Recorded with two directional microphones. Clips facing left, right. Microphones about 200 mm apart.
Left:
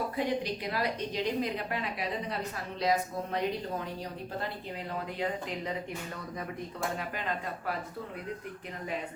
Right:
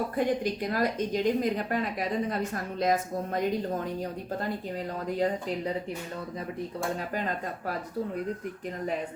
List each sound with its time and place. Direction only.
0.2 s a woman's voice: 45° right (ahead or behind)
5.0 s speech: 40° right (ahead or behind)
7.1 s speech: 40° right (ahead or behind)